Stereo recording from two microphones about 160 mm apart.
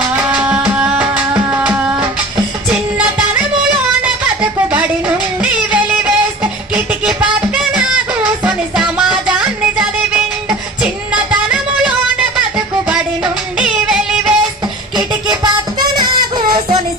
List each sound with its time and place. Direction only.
0.3 s music: 10° right (ahead or behind)
4.7 s music: 10° right (ahead or behind)
12.9 s music: 5° right (ahead or behind)
14.9 s music: 25° right (ahead or behind)